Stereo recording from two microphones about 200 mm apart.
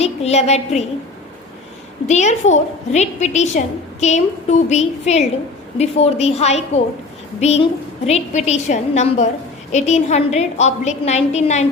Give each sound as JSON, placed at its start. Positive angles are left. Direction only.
{"t": 0.0, "sound": "a woman's voice", "side_deg": 30}
{"t": 2.0, "sound": "a woman's voice", "side_deg": 35}